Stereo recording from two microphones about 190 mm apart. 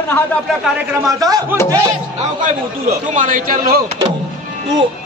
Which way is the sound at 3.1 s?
45° right (ahead or behind).